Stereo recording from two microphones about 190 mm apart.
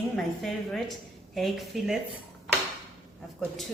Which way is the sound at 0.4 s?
Centre (ahead or behind).